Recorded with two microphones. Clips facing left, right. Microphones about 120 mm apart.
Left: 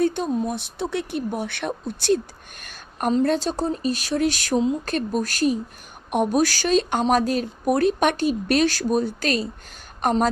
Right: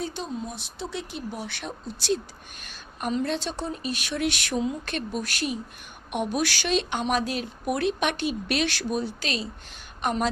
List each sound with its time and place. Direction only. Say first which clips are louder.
0.0 s speech: left 10 dB; 55° left (ahead or behind); by 10.2 s 40° left (ahead or behind)